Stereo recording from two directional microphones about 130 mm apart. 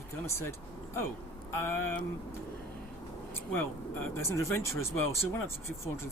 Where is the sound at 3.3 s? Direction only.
15° left (ahead or behind).